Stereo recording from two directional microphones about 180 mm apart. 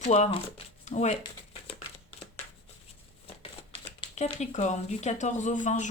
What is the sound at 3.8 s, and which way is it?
Speech, 35° left (ahead or behind).